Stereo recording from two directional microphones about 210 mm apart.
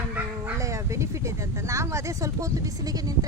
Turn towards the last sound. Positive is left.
turn(degrees=-15)  # may be behind; listen again after turning